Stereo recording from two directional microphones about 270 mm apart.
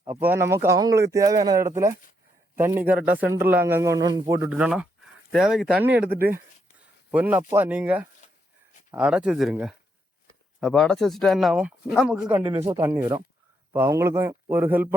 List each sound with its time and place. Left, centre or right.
0.0 s a man's voice: centre
7.1 s speech: centre
12.4 s a man's voice: centre